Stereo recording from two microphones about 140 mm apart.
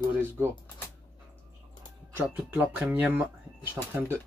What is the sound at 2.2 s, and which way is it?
Speech, 15° right (ahead or behind).